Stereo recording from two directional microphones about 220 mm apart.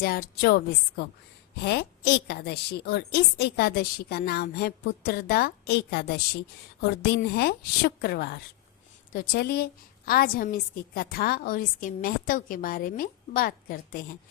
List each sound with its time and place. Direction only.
0.0 s a woman's voice: 45° left (ahead or behind)